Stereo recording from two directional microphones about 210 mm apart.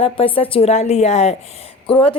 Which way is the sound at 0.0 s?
25° left (ahead or behind).